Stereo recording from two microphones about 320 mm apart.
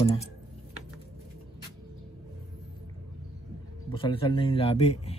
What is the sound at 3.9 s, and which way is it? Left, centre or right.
Speech, centre.